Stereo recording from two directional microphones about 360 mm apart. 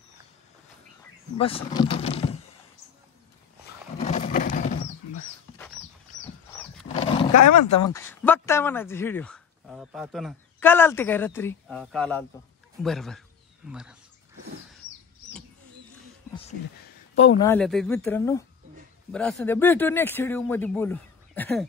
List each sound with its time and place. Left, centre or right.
1.4 s speech: centre
4.0 s a sound: centre
6.9 s roaring cats: centre
7.8 s speech: centre
17.2 s speech: centre